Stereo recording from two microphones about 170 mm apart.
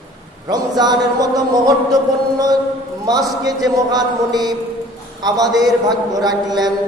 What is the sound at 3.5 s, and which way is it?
A man's voice, 20° right (ahead or behind).